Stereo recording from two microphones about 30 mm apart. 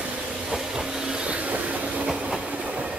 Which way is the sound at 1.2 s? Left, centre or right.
Right.